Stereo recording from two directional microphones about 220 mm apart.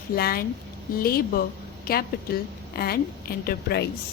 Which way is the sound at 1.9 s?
40° left (ahead or behind).